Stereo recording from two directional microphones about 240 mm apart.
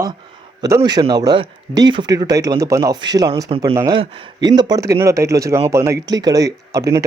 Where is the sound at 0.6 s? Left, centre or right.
Centre.